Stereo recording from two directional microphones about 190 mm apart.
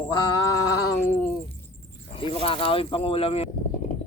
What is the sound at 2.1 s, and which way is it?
Speech, 30° left (ahead or behind).